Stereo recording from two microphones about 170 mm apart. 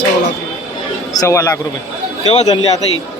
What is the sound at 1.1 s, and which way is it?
Speech, 20° left (ahead or behind).